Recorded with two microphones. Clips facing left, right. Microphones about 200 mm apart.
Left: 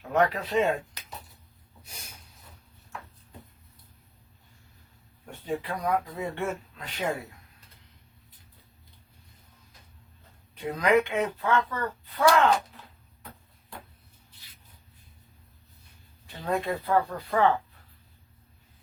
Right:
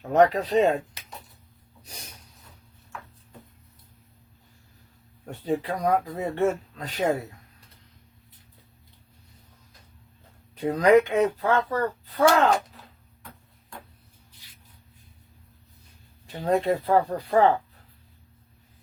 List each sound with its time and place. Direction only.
0.1 s speech: 40° right (ahead or behind)
1.8 s a sound: 35° right (ahead or behind)
5.2 s speech: 40° right (ahead or behind)
10.5 s speech: 35° right (ahead or behind)
16.2 s speech: 40° right (ahead or behind)